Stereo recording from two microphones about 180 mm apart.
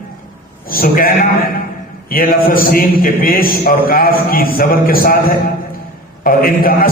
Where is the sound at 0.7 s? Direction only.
55° left (ahead or behind).